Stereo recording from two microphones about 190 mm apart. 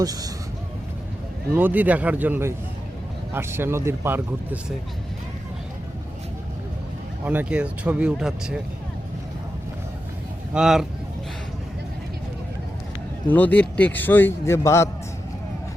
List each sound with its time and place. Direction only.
0.0 s speech: 20° right (ahead or behind)
1.5 s speech: 10° right (ahead or behind)
7.3 s speech: 5° right (ahead or behind)
10.5 s speech: 5° right (ahead or behind)
13.2 s a man's voice: 10° left (ahead or behind)